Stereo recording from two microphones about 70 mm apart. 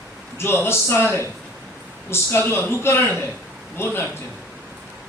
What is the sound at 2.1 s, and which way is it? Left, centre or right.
A man's voice, left.